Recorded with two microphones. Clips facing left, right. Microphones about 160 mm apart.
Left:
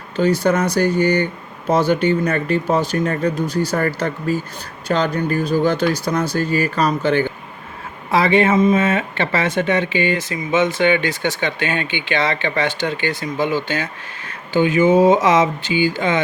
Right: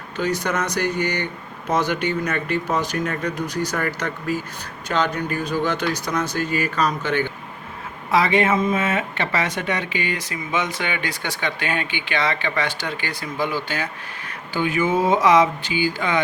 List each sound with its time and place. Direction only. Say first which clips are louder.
0.2 s speech: left 7 dB; 30° left (ahead or behind)